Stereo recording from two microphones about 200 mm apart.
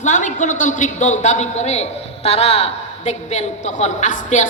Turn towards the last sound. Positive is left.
turn(degrees=35)  # may be behind; listen again after turning